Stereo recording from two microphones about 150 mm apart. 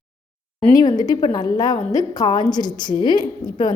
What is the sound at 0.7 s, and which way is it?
A woman's voice, 25° left (ahead or behind).